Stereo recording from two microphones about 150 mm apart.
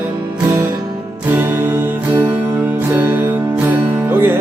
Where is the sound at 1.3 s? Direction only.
15° right (ahead or behind).